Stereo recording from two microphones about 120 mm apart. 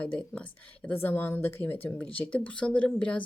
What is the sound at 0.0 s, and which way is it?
Speech, 10° left (ahead or behind).